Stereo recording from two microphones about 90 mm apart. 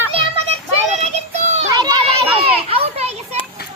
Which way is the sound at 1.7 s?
50° right (ahead or behind).